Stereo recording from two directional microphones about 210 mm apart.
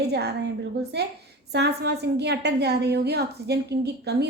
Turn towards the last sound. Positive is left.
turn(degrees=-50)  # may be behind; listen again after turning